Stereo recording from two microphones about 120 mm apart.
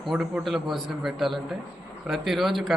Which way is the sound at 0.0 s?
5° right (ahead or behind).